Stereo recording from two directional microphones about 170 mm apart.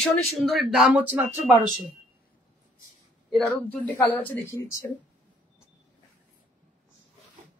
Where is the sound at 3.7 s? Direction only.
10° left (ahead or behind).